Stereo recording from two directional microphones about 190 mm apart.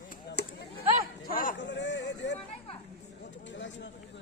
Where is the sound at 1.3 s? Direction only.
45° left (ahead or behind).